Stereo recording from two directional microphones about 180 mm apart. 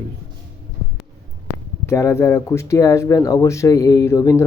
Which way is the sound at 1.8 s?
15° left (ahead or behind).